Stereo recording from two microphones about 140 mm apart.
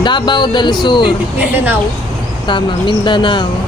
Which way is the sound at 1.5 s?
10° right (ahead or behind).